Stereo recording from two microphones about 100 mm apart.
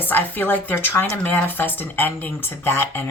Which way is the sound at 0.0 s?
20° left (ahead or behind).